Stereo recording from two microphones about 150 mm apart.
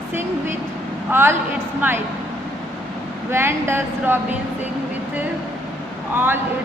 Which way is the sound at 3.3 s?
15° right (ahead or behind).